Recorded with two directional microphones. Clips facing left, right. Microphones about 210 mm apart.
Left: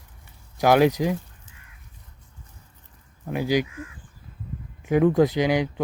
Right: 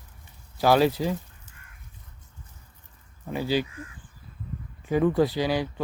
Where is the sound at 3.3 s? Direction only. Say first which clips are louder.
Left 3 dB; 15° left (ahead or behind).